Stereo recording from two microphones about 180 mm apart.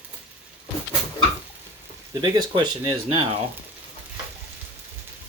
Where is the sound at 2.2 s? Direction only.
25° right (ahead or behind).